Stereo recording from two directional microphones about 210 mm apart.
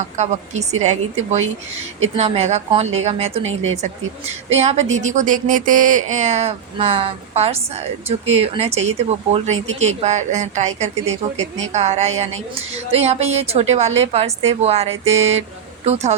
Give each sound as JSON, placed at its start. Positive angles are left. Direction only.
{"t": 0.0, "sound": "speech", "side_deg": -35}
{"t": 2.1, "sound": "speech", "side_deg": -30}
{"t": 3.4, "sound": "speech", "side_deg": -70}
{"t": 4.5, "sound": "speech", "side_deg": -30}